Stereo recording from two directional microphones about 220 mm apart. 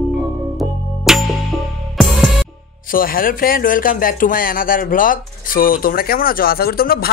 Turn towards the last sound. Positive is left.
turn(degrees=45)  # may be behind; listen again after turning